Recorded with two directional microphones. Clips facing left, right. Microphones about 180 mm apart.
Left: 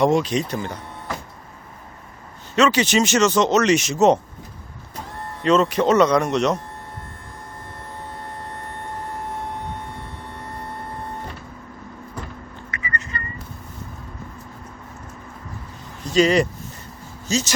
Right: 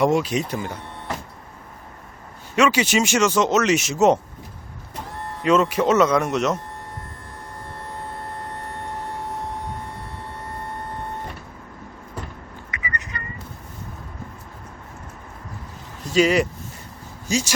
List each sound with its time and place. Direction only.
0.0 s speech: 5° right (ahead or behind)
2.6 s speech: 10° right (ahead or behind)
5.4 s speech: 10° right (ahead or behind)
12.7 s bird: 15° right (ahead or behind)
16.1 s speech: 5° right (ahead or behind)